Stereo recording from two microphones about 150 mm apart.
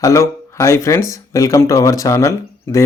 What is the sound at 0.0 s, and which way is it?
Speech, 20° left (ahead or behind).